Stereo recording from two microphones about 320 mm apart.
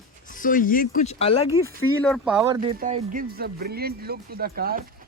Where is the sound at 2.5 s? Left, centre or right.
Centre.